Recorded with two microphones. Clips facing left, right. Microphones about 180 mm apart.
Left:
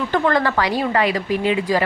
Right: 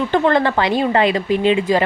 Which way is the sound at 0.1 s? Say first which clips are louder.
Right 2 dB; 25° right (ahead or behind).